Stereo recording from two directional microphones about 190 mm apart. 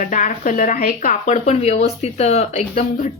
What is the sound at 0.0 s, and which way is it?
Speech, 45° left (ahead or behind).